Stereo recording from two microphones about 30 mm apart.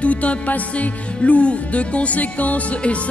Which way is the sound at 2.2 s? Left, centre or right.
Left.